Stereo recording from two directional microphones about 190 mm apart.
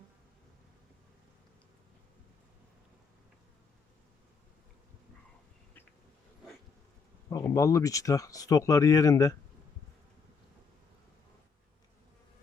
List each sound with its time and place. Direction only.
7.3 s speech: 15° left (ahead or behind)